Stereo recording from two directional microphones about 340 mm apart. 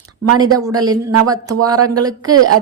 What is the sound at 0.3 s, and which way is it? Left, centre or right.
Speech, centre.